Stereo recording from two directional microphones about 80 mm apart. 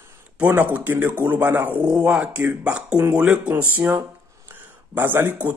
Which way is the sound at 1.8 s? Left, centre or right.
Right.